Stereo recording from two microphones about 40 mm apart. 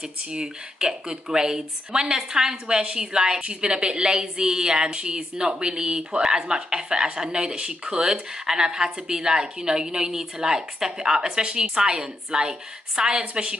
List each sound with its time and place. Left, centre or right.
0.3 s a woman's voice: right
13.2 s a woman's voice: right